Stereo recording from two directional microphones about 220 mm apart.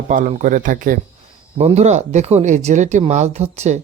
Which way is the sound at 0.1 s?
35° right (ahead or behind).